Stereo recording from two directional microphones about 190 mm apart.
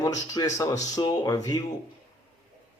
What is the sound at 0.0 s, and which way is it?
Speech, 20° left (ahead or behind).